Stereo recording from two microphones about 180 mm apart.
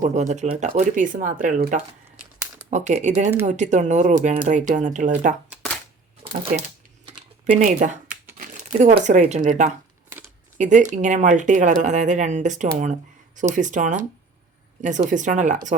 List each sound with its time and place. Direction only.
0.0 s speech: 40° right (ahead or behind)
6.2 s a sound: 20° right (ahead or behind)
7.5 s speech: 40° right (ahead or behind)